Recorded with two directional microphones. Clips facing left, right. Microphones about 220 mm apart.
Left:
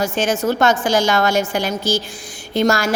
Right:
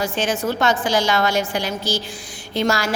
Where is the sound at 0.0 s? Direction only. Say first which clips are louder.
Left 3 dB; 45° left (ahead or behind).